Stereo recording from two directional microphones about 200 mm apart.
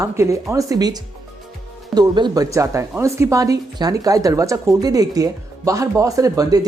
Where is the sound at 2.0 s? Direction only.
20° right (ahead or behind).